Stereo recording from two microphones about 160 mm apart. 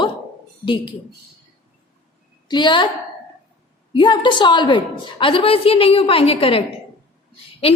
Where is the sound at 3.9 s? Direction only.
30° left (ahead or behind).